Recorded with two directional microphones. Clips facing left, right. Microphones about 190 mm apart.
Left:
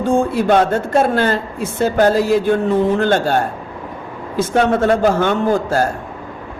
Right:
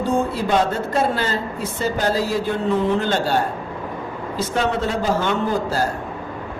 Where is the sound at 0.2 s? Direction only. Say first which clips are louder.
Left 5 dB; 55° left (ahead or behind).